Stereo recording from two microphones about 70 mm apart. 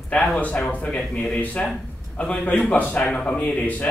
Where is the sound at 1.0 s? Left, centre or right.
Centre.